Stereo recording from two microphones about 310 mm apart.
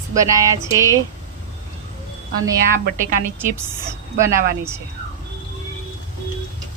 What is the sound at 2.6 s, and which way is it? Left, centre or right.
Speech, right.